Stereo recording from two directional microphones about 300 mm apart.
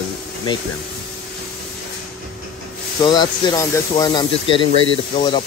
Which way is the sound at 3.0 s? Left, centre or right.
Centre.